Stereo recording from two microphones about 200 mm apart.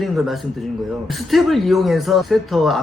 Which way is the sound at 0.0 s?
Centre (ahead or behind).